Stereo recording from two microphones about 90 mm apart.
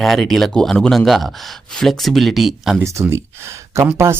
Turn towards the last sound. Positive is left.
turn(degrees=-30)  # may be behind; listen again after turning